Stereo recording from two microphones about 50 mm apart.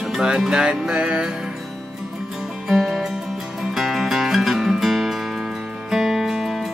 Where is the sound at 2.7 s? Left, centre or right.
Centre.